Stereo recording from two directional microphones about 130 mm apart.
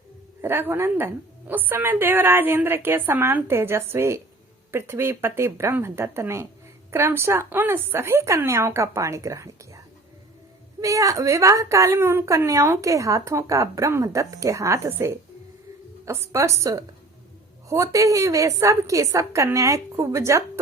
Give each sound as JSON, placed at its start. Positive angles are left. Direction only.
{"t": 0.4, "sound": "a woman's voice", "side_deg": -20}